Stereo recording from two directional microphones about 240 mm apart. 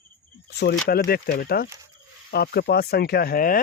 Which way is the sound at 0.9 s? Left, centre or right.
Left.